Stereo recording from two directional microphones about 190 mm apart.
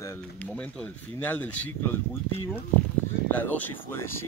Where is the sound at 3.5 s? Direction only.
10° left (ahead or behind).